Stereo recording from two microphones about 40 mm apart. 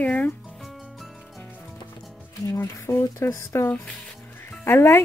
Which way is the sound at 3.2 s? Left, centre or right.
Left.